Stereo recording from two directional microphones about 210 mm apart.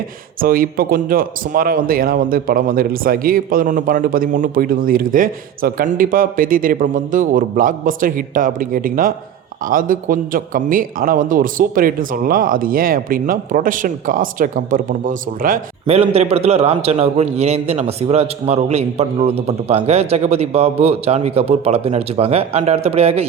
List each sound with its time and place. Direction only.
0.4 s a man's voice: 45° right (ahead or behind)
16.0 s a man's voice: 30° right (ahead or behind)